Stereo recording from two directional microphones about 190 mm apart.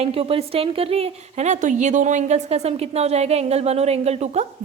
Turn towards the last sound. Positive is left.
turn(degrees=-35)  # may be behind; listen again after turning